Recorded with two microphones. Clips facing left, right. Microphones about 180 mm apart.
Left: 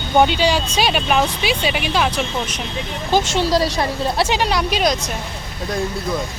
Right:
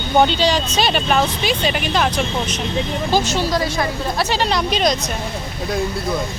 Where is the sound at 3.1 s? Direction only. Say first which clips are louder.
Left 3 dB; 25° left (ahead or behind).